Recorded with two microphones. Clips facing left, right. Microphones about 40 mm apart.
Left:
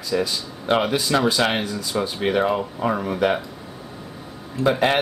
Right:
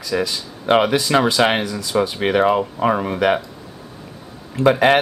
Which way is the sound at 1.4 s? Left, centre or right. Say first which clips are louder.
Right 4 dB; right.